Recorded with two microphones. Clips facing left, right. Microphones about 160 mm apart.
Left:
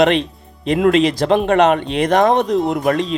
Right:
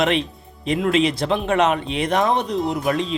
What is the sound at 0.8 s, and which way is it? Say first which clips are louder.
Speech: left 6 dB; 40° left (ahead or behind).